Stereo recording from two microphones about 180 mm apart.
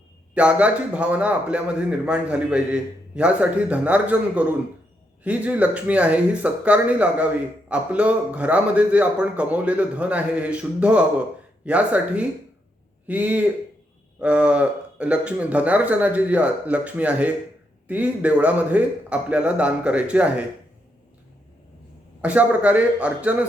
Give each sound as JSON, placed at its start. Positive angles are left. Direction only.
{"t": 0.3, "sound": "a man's voice", "side_deg": -5}
{"t": 22.2, "sound": "a man's voice", "side_deg": -5}